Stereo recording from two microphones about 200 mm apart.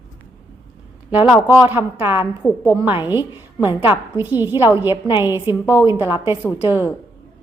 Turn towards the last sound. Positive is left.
turn(degrees=-10)  # may be behind; listen again after turning